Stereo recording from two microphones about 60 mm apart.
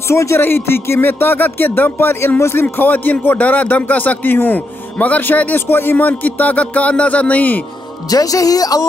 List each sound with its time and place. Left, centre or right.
0.1 s speech: left
8.1 s speech: left